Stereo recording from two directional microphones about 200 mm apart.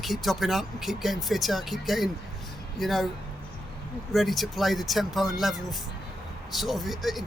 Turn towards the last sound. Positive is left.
turn(degrees=0)  # may be behind; listen again after turning